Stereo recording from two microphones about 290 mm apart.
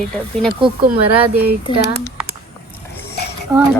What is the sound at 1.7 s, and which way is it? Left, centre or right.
Speech, centre.